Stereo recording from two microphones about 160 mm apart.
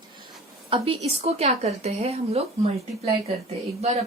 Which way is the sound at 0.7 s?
35° right (ahead or behind).